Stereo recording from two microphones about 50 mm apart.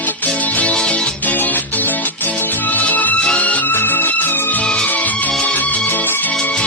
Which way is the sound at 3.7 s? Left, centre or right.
Left.